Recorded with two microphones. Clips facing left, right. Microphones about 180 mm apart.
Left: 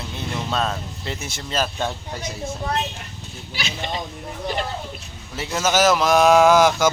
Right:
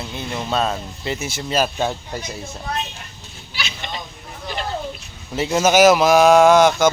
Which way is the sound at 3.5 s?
45° left (ahead or behind).